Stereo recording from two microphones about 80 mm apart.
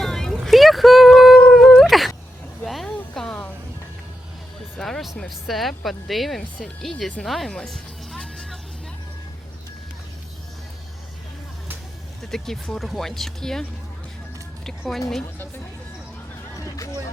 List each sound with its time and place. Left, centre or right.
0.0 s a sound: centre
3.2 s music: centre
4.8 s music: centre
5.5 s speech: centre
7.2 s music: centre
12.3 s a woman's voice: centre
16.6 s a sound: left